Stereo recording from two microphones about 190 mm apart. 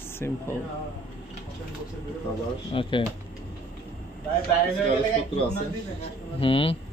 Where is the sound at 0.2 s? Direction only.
10° left (ahead or behind).